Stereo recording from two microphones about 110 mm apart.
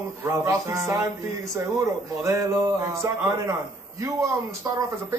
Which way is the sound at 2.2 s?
25° right (ahead or behind).